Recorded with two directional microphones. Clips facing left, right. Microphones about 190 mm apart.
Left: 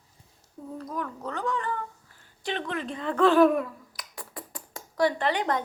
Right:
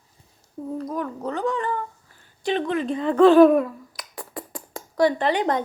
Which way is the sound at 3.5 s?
90° right.